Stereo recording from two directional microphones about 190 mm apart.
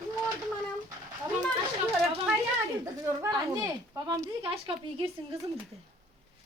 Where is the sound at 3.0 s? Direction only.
15° right (ahead or behind).